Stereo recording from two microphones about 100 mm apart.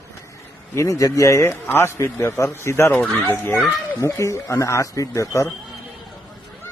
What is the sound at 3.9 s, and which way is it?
Speech, 30° left (ahead or behind).